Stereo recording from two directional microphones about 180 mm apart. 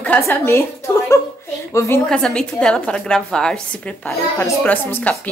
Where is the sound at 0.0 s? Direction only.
10° left (ahead or behind).